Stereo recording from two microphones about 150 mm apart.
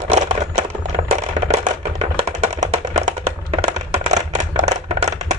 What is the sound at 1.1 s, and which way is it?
Music, 45° right (ahead or behind).